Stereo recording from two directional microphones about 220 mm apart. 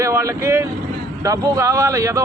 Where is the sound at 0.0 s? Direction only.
15° right (ahead or behind).